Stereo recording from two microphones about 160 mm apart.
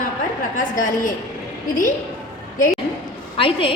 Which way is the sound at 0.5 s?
55° left (ahead or behind).